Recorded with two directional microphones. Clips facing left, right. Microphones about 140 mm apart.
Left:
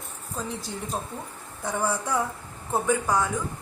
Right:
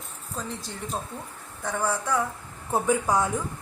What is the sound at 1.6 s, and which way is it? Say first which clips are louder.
Speech: even; 15° left (ahead or behind).